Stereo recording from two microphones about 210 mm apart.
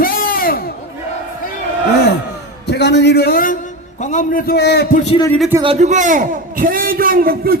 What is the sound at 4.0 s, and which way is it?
A man's voice, 35° left (ahead or behind).